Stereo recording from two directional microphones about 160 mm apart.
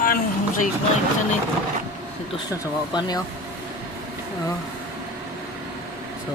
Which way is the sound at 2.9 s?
25° left (ahead or behind).